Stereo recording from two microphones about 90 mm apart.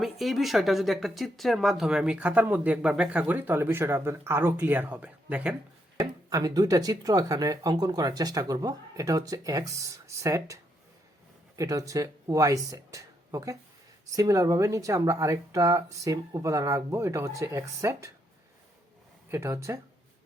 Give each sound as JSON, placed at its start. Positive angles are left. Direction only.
{"t": 0.0, "sound": "speech", "side_deg": 0}
{"t": 6.0, "sound": "speech", "side_deg": -45}
{"t": 19.3, "sound": "speech", "side_deg": -30}